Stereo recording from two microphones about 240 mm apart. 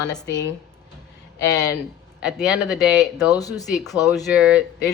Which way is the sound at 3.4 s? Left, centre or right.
Centre.